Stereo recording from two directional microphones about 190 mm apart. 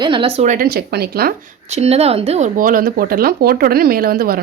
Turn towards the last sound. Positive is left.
turn(degrees=-50)  # may be behind; listen again after turning